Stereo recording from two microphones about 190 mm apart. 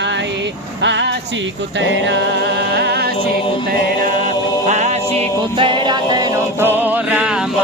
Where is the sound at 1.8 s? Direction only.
65° right (ahead or behind).